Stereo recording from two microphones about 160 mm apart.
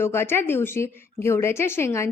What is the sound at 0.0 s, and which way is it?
A woman's voice, 15° left (ahead or behind).